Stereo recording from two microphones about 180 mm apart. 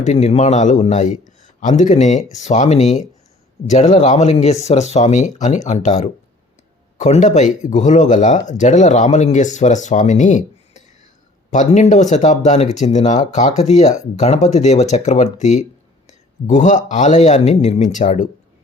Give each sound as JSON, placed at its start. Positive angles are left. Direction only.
{"t": 0.0, "sound": "a man's voice", "side_deg": 40}